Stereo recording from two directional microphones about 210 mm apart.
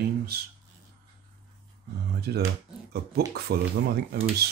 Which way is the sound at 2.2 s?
50° right (ahead or behind).